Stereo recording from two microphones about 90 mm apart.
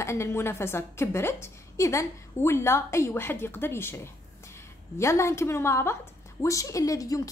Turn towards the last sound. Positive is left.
turn(degrees=40)  # may be behind; listen again after turning